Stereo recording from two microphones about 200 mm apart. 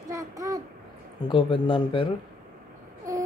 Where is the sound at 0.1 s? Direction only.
15° right (ahead or behind).